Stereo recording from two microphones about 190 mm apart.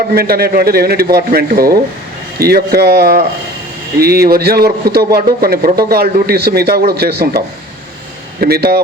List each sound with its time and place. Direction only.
0.1 s a man's voice: 55° right (ahead or behind)